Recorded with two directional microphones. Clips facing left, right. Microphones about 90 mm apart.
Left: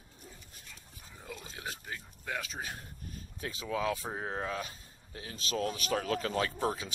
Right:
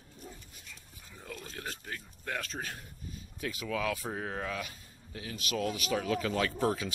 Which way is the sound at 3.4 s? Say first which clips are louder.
Even; 25° left (ahead or behind).